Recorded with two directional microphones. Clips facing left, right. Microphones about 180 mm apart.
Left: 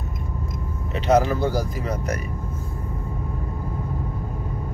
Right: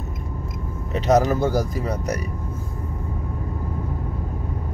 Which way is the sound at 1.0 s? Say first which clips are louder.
Right 1 dB; 40° right (ahead or behind).